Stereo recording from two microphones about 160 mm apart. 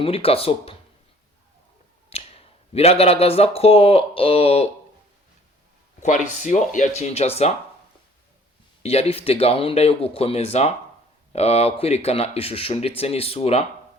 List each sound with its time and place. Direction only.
0.0 s speech: 35° left (ahead or behind)
2.0 s speech: 40° left (ahead or behind)
6.0 s speech: 50° left (ahead or behind)
8.8 s speech: 40° left (ahead or behind)